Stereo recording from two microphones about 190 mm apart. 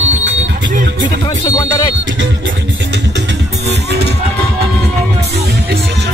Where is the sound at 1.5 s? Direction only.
20° left (ahead or behind).